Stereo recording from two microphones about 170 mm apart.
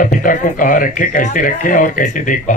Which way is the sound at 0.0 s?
50° left (ahead or behind).